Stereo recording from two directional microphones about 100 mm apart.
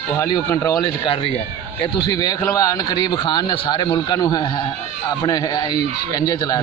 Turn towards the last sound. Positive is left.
turn(degrees=35)  # may be behind; listen again after turning